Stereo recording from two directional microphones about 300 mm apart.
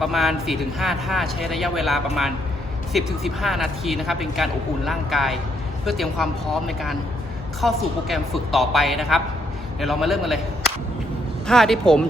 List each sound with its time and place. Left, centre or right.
0.0 s speech: centre